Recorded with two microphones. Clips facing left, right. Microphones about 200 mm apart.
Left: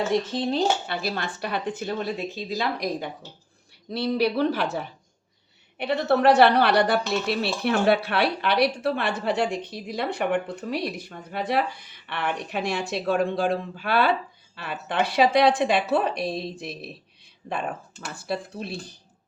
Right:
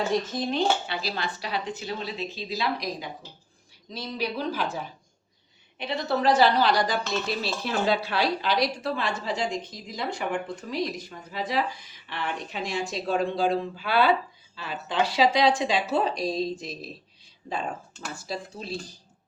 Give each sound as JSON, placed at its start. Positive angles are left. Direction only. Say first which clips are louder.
{"t": 0.1, "sound": "dishes", "louder": "left 3 dB", "side_deg": 30}
{"t": 0.9, "sound": "speech", "louder": "left 2 dB", "side_deg": 50}
{"t": 3.8, "sound": "a woman's voice", "louder": "left 8 dB", "side_deg": 65}
{"t": 18.1, "sound": "a woman's voice", "louder": "left 5 dB", "side_deg": 60}